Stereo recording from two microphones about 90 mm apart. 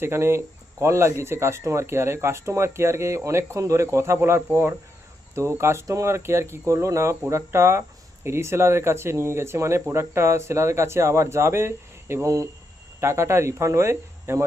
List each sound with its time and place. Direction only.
0.0 s speech: 25° right (ahead or behind)